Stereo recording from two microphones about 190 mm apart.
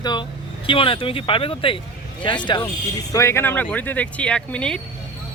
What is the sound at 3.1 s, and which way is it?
Speech, 15° left (ahead or behind).